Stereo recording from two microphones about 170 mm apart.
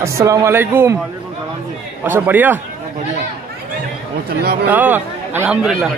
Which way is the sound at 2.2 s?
10° right (ahead or behind).